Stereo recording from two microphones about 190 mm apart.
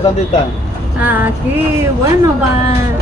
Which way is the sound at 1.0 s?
10° right (ahead or behind).